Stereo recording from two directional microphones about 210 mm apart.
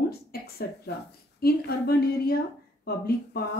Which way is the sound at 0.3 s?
50° left (ahead or behind).